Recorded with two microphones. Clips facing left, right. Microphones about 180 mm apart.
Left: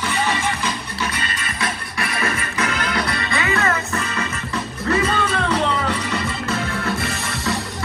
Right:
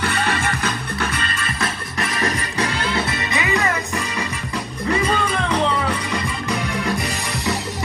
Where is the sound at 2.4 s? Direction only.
35° right (ahead or behind); by 6.9 s 15° right (ahead or behind).